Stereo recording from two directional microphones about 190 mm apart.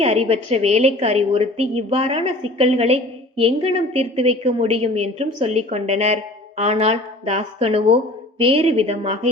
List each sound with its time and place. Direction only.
0.0 s a woman's voice: 35° right (ahead or behind)